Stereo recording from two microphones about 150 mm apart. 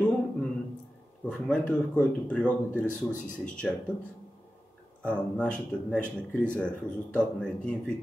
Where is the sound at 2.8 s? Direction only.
60° left (ahead or behind).